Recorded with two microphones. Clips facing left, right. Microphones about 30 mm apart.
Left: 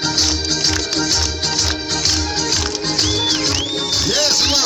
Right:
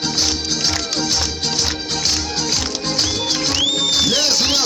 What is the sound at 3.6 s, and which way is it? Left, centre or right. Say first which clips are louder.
Music: right 3 dB; right.